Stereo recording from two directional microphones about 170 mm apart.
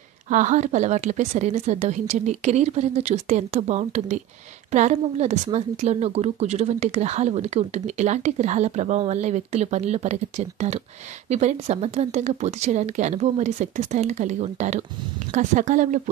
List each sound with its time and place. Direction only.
0.3 s a woman's voice: 45° right (ahead or behind)